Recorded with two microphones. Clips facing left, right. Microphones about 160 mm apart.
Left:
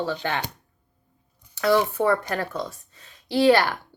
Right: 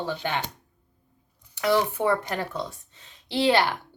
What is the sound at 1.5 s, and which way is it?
Speech, 20° right (ahead or behind).